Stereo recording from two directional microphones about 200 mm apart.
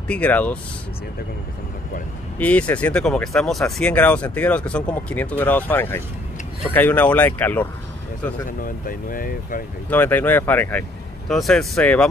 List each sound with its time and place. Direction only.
0.1 s speech: 5° left (ahead or behind)
2.3 s speech: 5° left (ahead or behind)
8.5 s speech: 45° left (ahead or behind)
9.8 s speech: 10° left (ahead or behind)